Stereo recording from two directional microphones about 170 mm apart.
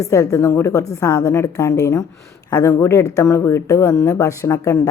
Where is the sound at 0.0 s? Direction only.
20° left (ahead or behind).